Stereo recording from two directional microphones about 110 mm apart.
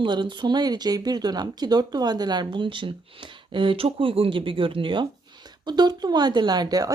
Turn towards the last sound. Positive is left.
turn(degrees=-35)  # may be behind; listen again after turning